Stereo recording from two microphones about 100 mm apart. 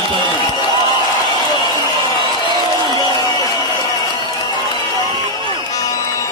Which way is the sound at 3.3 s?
45° left (ahead or behind).